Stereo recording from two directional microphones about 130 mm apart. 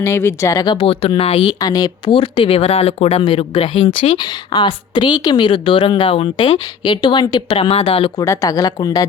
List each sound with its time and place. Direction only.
0.0 s a woman's voice: 20° left (ahead or behind)
0.6 s speech: 35° left (ahead or behind)
1.5 s speech: 30° left (ahead or behind); by 8.1 s 50° left (ahead or behind)
8.2 s a woman's voice: 25° left (ahead or behind)